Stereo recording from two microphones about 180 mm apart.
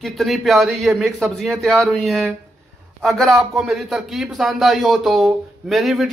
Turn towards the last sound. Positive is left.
turn(degrees=0)  # may be behind; listen again after turning